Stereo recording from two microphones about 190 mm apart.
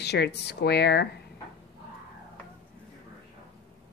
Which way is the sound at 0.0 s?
60° left (ahead or behind).